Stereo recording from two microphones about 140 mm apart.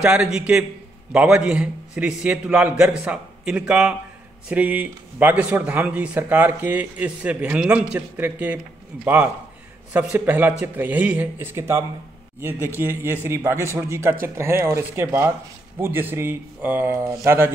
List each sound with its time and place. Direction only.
0.0 s a man's voice: 5° right (ahead or behind)